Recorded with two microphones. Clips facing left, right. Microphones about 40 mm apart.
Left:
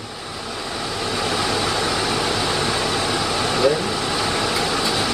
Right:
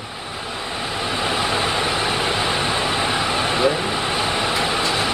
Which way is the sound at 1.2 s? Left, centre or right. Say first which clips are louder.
Right 1 dB; right.